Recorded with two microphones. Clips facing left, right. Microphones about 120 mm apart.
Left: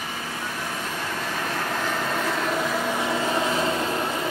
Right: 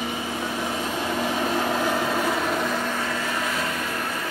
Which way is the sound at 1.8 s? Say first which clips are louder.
Right 3 dB; 10° right (ahead or behind).